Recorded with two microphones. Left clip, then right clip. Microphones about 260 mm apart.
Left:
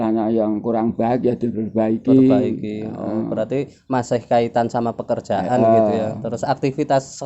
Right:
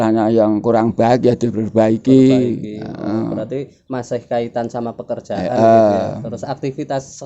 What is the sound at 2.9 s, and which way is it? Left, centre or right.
Speech, right.